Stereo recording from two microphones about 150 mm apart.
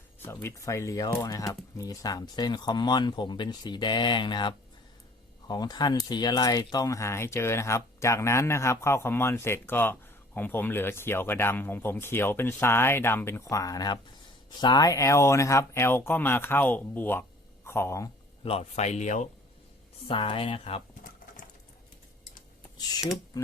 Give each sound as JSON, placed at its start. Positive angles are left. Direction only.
{"t": 0.3, "sound": "speech", "side_deg": 20}
{"t": 18.4, "sound": "a man's voice", "side_deg": 45}
{"t": 20.1, "sound": "speech", "side_deg": 35}